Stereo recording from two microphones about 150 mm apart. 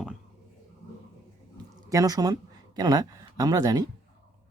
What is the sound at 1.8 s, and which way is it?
Speech, 25° right (ahead or behind).